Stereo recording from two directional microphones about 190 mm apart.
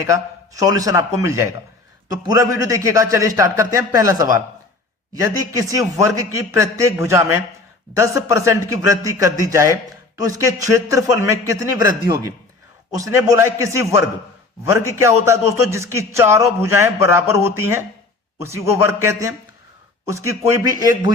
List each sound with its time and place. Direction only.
0.0 s a man's voice: 15° right (ahead or behind)